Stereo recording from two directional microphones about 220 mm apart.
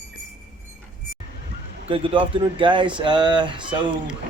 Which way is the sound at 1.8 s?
25° right (ahead or behind).